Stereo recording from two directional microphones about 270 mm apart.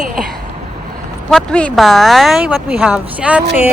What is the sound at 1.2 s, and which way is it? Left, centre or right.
Speech, centre.